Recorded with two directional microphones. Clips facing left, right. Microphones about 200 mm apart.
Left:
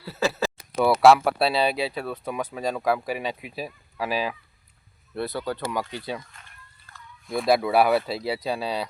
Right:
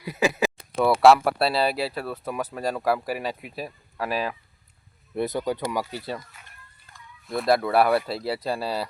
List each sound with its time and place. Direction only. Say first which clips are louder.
0.0 s speech: right 2 dB; 15° right (ahead or behind)
1.0 s speech: even; centre (ahead or behind)
5.1 s speech: right 3 dB; 15° right (ahead or behind)
6.3 s a sound: even; 5° right (ahead or behind)
7.3 s speech: left 1 dB; centre (ahead or behind)